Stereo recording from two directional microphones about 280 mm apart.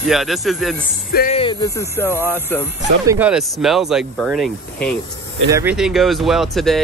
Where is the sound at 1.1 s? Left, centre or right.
Left; by 2.1 s centre.